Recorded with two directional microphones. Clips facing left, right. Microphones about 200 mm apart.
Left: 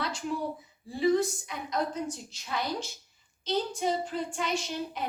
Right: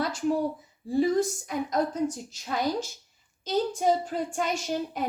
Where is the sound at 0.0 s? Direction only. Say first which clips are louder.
Right 6 dB; 45° right (ahead or behind).